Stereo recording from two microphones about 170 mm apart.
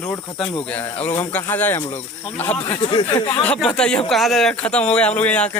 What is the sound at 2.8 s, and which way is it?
Speech, 30° left (ahead or behind).